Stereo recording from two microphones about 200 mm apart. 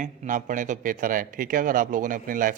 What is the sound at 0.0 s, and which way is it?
A man's voice, 40° right (ahead or behind).